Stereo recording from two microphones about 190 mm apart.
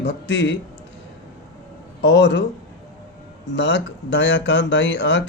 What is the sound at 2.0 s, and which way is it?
Speech, 60° left (ahead or behind).